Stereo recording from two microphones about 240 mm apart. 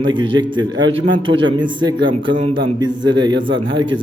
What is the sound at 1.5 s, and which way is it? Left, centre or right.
A man's voice, centre.